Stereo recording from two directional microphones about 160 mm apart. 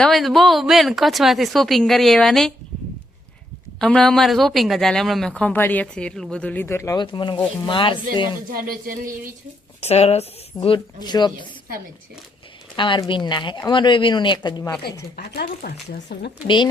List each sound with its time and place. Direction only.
0.0 s speech: centre (ahead or behind)
3.8 s speech: 5° left (ahead or behind)
7.0 s speech: 30° left (ahead or behind)
8.4 s speech: 65° right (ahead or behind)
9.8 s speech: 40° left (ahead or behind)
12.7 s speech: 30° left (ahead or behind)
15.1 s speech: 75° left (ahead or behind)